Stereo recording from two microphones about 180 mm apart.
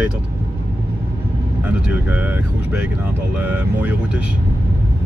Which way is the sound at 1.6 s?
10° right (ahead or behind).